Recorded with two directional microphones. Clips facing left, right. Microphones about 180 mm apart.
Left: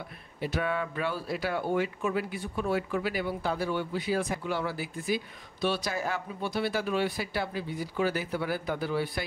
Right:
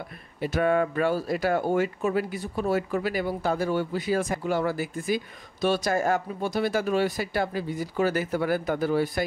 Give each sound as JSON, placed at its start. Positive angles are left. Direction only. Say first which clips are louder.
{"t": 0.4, "sound": "speech", "louder": "right 7 dB", "side_deg": -45}